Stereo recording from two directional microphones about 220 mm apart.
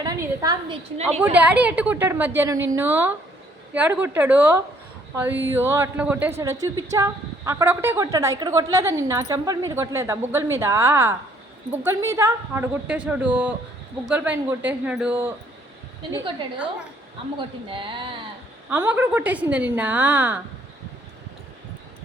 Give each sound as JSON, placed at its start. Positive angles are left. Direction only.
{"t": 0.0, "sound": "a sound", "side_deg": -15}
{"t": 1.2, "sound": "a woman's voice", "side_deg": -5}
{"t": 17.3, "sound": "speech", "side_deg": -25}
{"t": 18.7, "sound": "a woman's voice", "side_deg": -5}